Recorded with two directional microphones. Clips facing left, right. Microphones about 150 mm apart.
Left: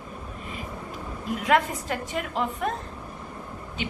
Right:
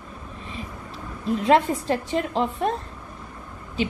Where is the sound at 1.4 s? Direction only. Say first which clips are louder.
Right 4 dB; 30° right (ahead or behind).